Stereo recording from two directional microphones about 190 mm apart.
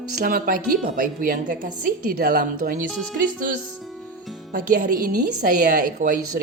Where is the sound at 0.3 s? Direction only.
45° right (ahead or behind).